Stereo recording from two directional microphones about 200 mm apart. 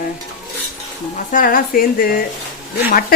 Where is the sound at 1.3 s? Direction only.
45° left (ahead or behind).